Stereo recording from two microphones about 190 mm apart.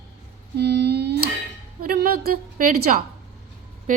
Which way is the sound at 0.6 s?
60° right (ahead or behind).